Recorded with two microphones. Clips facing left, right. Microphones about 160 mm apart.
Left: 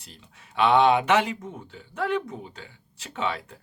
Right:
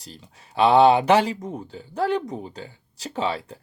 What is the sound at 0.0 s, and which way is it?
Speech, 35° right (ahead or behind).